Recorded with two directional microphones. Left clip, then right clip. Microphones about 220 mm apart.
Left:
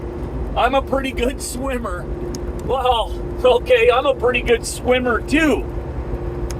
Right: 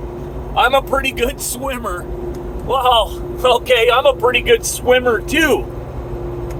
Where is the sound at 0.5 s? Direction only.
20° right (ahead or behind).